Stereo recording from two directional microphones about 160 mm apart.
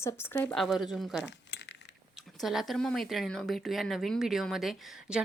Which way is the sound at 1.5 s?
90° left.